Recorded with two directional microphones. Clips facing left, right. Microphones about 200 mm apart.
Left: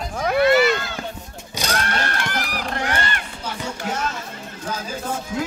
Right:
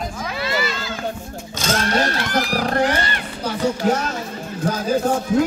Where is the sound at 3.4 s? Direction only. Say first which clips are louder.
Right 13 dB; 40° right (ahead or behind).